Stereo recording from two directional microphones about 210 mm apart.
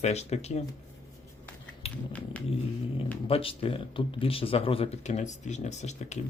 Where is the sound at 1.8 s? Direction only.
30° left (ahead or behind).